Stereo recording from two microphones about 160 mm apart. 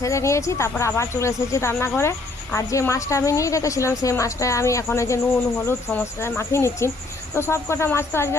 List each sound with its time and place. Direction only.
0.0 s speech: 20° left (ahead or behind)